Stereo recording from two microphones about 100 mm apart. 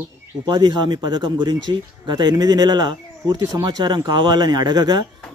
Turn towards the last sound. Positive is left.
turn(degrees=-45)  # may be behind; listen again after turning